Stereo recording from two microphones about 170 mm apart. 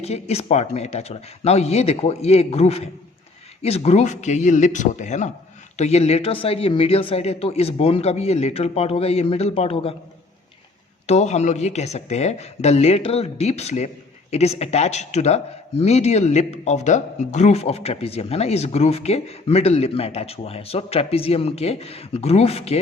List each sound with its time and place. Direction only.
0.0 s speech: 40° left (ahead or behind)
11.0 s speech: 40° left (ahead or behind)